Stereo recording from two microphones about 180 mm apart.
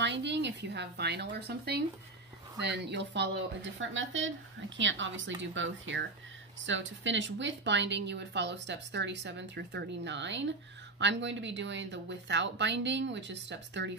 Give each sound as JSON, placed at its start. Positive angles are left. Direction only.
{"t": 0.0, "sound": "a woman's voice", "side_deg": -75}
{"t": 3.7, "sound": "a woman's voice", "side_deg": -90}